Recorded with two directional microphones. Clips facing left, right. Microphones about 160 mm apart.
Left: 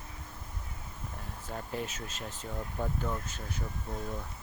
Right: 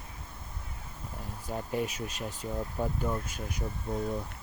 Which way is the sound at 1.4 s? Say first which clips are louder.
Right 5 dB; 15° right (ahead or behind).